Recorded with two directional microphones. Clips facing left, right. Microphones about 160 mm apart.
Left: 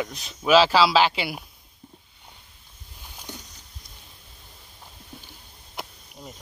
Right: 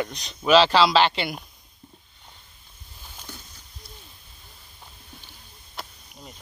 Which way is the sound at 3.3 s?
20° left (ahead or behind).